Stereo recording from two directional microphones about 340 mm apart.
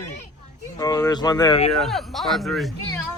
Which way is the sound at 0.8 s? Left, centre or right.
Centre.